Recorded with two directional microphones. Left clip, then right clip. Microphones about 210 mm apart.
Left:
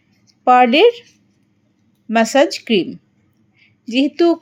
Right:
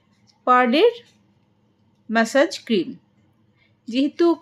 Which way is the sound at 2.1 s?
20° left (ahead or behind).